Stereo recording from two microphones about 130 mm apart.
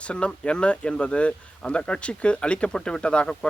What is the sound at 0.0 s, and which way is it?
Speech, 10° left (ahead or behind).